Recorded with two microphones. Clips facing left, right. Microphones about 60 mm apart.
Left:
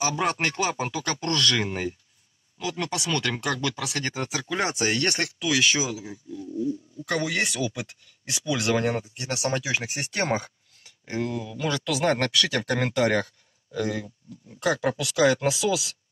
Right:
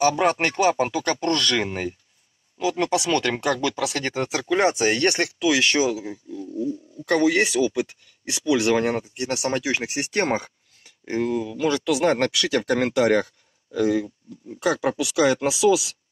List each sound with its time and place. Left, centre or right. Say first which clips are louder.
0.1 s speech: right 5 dB; centre
2.5 s speech: right 8 dB; right
4.6 s speech: right 4 dB; centre
11.1 s speech: right 5 dB; centre